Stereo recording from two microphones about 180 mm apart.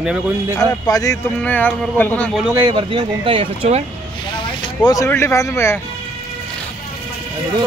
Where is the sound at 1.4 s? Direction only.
10° left (ahead or behind).